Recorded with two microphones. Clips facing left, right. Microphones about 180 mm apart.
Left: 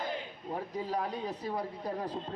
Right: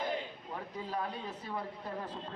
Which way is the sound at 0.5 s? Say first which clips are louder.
Left 5 dB; 35° left (ahead or behind).